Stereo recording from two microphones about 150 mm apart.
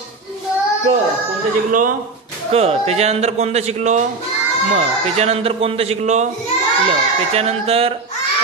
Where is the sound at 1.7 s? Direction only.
65° right (ahead or behind).